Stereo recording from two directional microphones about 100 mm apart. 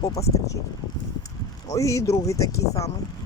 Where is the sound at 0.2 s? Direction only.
35° left (ahead or behind).